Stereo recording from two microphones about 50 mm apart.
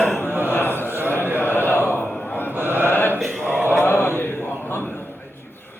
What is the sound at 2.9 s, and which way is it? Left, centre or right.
Mantra, left.